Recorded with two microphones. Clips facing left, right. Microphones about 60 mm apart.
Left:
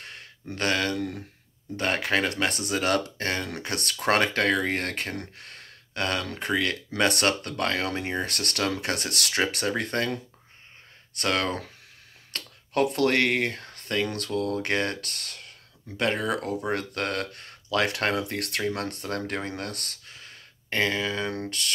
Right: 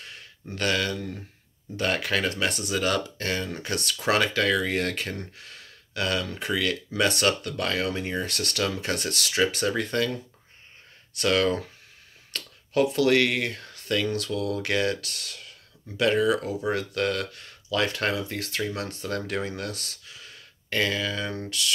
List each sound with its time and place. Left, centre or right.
0.0 s a sound: left
0.9 s speech: left
1.8 s speech: left
3.4 s speech: left
8.3 s speech: left
11.1 s speech: left
18.6 s speech: left